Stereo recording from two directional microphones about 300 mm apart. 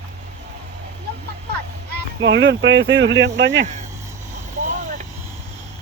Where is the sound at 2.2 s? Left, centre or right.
Right.